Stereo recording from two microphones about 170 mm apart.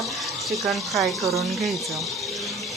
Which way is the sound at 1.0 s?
20° right (ahead or behind).